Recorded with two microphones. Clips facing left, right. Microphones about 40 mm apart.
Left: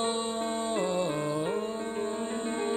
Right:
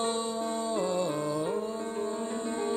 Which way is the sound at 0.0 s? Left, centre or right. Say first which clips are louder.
Even; left.